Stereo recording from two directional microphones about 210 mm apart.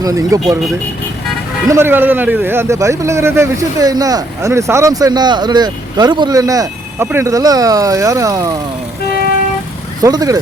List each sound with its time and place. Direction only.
0.0 s a man's voice: 15° right (ahead or behind)
1.6 s a man's voice: 10° right (ahead or behind)
10.0 s a man's voice: 15° right (ahead or behind)